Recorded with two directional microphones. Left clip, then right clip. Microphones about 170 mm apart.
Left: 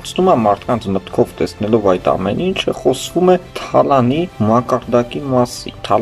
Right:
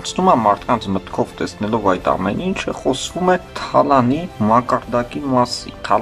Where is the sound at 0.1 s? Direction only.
15° left (ahead or behind).